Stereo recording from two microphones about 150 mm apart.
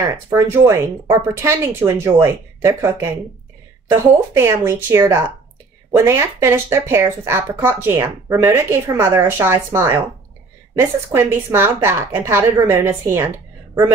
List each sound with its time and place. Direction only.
0.3 s speech: 15° right (ahead or behind)